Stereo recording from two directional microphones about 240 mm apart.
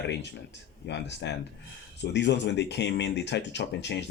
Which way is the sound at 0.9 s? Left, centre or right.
Left.